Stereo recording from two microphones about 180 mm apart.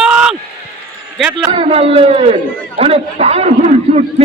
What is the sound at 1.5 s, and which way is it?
A man's voice, 35° right (ahead or behind).